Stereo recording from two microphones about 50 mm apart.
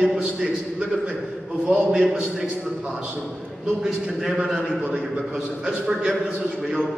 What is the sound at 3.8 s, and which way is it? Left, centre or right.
A man's voice, centre.